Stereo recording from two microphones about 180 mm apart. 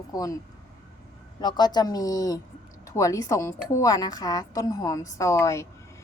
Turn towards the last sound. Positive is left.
turn(degrees=15)  # may be behind; listen again after turning